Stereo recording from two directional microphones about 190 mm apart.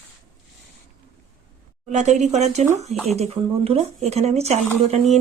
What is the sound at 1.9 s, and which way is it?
Speech, 35° right (ahead or behind).